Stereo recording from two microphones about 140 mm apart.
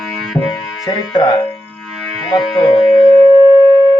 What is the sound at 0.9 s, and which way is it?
Speech, 30° left (ahead or behind).